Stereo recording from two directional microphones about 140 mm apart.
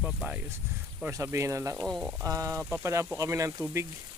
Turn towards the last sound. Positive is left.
turn(degrees=-20)  # may be behind; listen again after turning